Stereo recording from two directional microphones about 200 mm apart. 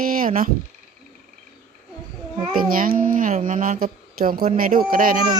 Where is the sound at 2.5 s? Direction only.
45° right (ahead or behind).